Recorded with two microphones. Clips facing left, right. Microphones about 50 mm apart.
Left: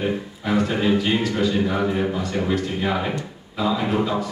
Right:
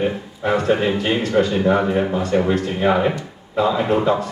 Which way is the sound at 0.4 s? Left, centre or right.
Right.